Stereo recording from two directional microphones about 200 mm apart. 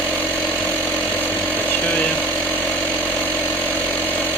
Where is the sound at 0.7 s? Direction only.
10° left (ahead or behind).